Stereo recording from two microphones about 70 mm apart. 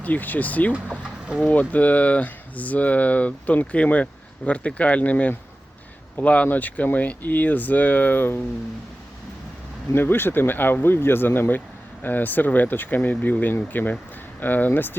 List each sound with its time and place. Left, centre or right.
0.0 s speech: left
0.7 s speech: centre
1.5 s speech: left
9.9 s speech: left